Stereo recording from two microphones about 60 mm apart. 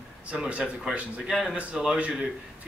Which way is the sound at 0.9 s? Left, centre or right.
Right.